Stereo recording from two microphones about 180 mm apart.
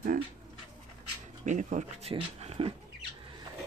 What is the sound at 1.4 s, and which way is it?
Speech, 45° right (ahead or behind).